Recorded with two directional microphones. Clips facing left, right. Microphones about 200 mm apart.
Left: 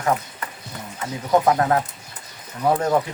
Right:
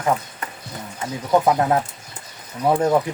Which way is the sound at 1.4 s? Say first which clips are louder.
Right 1 dB; 15° right (ahead or behind).